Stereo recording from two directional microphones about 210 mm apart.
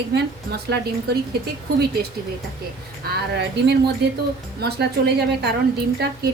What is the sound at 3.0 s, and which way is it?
A woman's voice, 50° right (ahead or behind).